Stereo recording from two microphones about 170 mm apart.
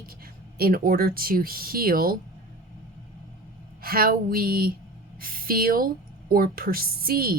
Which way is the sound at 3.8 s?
60° right (ahead or behind).